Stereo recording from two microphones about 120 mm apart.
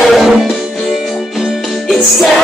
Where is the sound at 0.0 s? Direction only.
Centre (ahead or behind).